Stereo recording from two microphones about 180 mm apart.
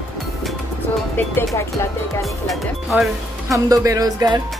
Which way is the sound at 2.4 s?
Centre (ahead or behind).